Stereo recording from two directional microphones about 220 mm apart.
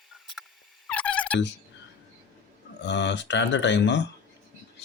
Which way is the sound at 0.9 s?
5° left (ahead or behind).